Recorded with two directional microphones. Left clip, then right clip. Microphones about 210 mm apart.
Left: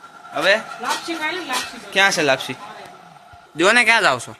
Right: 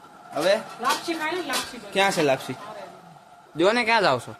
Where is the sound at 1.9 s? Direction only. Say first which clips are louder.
Left 5 dB; 5° right (ahead or behind).